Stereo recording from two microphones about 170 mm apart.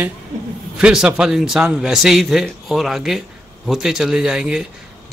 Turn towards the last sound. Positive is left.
turn(degrees=-5)  # may be behind; listen again after turning